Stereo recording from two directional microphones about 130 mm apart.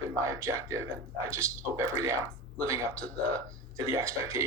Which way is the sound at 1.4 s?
20° right (ahead or behind).